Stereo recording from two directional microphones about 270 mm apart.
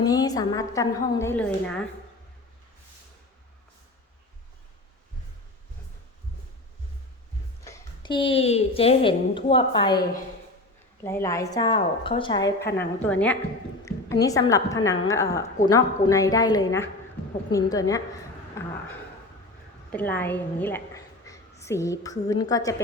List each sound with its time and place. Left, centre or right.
0.0 s a woman's voice: centre
7.6 s a woman's voice: centre
11.0 s a woman's voice: centre
19.9 s a woman's voice: centre